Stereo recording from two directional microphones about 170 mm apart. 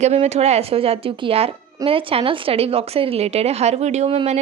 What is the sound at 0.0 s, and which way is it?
Speech, 40° right (ahead or behind).